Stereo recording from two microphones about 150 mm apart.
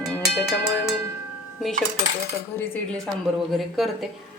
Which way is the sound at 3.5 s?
Centre (ahead or behind).